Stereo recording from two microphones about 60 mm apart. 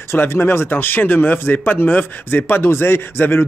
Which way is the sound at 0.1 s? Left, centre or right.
Left.